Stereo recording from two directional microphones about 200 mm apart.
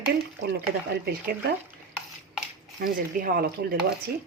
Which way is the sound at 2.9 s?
45° right (ahead or behind).